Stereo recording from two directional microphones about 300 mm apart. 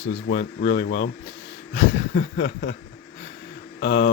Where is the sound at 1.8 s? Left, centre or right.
Left.